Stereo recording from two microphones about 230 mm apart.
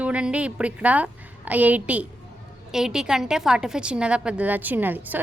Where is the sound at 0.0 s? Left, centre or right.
Centre.